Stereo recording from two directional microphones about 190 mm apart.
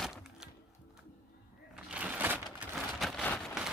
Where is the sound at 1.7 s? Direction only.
5° right (ahead or behind).